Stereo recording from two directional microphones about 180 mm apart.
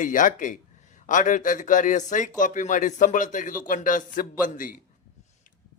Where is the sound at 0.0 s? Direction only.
45° left (ahead or behind).